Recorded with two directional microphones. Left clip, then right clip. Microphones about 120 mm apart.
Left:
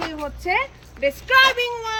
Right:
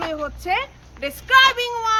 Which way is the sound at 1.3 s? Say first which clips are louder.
Right 2 dB; 5° right (ahead or behind).